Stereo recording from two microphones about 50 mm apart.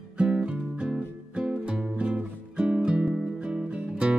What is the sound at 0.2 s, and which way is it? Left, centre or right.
Music, right.